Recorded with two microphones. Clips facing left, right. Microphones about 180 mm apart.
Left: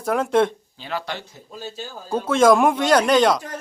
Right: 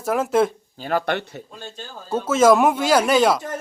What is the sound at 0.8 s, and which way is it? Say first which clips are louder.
Speech: right 7 dB; 55° right (ahead or behind).